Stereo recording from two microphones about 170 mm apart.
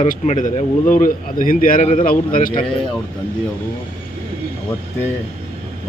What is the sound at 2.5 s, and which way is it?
Speech, 30° left (ahead or behind).